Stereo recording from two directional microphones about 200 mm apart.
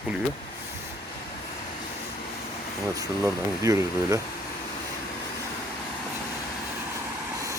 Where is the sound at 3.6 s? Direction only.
15° right (ahead or behind).